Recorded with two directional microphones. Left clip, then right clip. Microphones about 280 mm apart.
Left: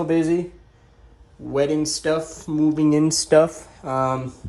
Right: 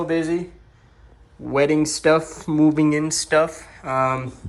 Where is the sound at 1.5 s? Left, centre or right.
Centre.